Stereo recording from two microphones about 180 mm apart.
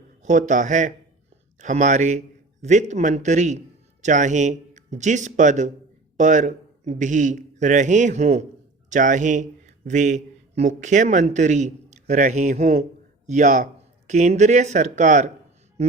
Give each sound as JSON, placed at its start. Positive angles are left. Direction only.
{"t": 0.2, "sound": "a man's voice", "side_deg": -45}